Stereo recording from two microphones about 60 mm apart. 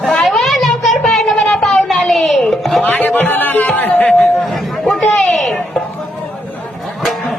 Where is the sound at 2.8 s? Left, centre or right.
Left.